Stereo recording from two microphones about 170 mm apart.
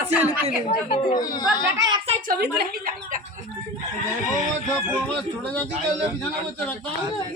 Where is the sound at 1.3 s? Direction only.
25° left (ahead or behind).